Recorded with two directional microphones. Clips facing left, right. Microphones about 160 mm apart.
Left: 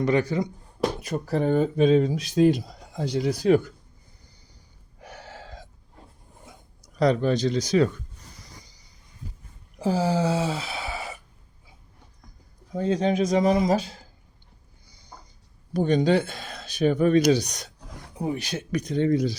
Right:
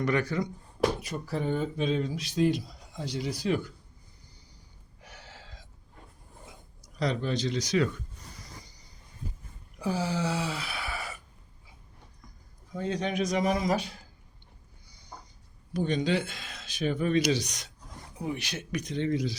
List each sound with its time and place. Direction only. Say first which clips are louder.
0.0 s speech: left 5 dB; 25° left (ahead or behind)
0.8 s speech: left 2 dB; 45° left (ahead or behind); by 2.0 s 75° left (ahead or behind)
2.0 s a man's voice: left 7 dB; 50° left (ahead or behind)
5.0 s a sound: left 8 dB; 50° left (ahead or behind)
7.0 s speech: left 8 dB; 50° left (ahead or behind)
9.7 s speech: left 7 dB; 30° left (ahead or behind)
12.7 s speech: left 7 dB; 35° left (ahead or behind)
16.0 s speech: left 7 dB; 35° left (ahead or behind)